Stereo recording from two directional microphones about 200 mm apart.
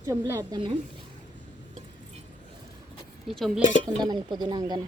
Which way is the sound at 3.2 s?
Centre (ahead or behind).